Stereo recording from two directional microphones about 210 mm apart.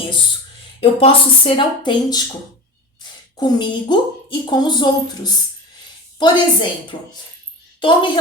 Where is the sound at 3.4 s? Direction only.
20° left (ahead or behind).